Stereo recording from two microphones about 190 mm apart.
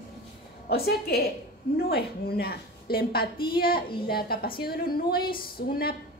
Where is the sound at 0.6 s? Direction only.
55° left (ahead or behind).